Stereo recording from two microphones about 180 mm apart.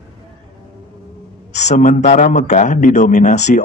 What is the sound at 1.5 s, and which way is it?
A man's voice, 40° left (ahead or behind).